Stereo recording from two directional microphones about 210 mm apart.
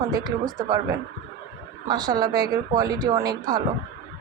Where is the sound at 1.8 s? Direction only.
20° right (ahead or behind).